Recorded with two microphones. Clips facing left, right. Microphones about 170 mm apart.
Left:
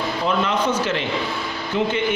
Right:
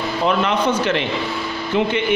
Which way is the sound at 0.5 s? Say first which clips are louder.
Right 3 dB; 65° right (ahead or behind).